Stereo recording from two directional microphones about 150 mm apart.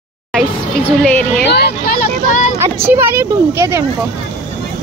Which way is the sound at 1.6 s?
85° left.